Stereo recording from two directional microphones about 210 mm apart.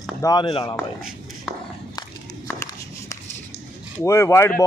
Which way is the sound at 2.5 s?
15° left (ahead or behind).